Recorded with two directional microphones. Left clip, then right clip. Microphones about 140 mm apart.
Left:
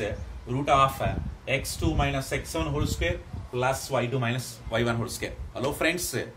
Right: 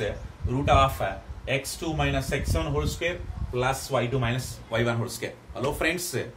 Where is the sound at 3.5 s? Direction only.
45° left (ahead or behind).